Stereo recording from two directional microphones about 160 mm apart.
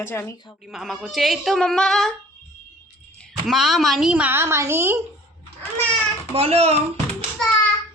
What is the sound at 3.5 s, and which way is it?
Speech, centre (ahead or behind).